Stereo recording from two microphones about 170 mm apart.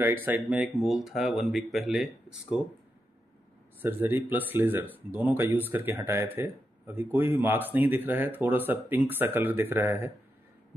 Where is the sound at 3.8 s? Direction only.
10° right (ahead or behind).